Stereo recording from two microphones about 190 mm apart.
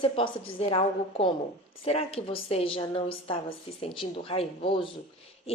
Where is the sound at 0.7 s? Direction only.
30° left (ahead or behind).